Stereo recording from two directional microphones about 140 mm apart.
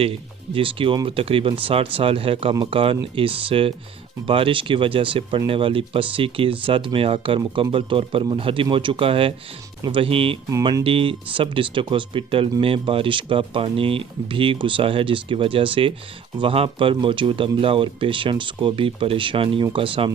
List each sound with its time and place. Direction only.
0.5 s speech: 40° right (ahead or behind)